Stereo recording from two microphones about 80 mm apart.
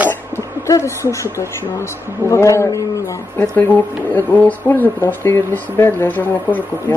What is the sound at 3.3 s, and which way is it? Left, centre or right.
Speech, left.